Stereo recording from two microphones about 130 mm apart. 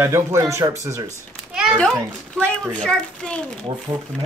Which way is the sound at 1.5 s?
5° right (ahead or behind).